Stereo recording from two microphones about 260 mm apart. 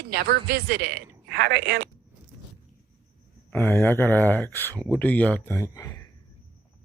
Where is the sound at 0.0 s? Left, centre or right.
Right.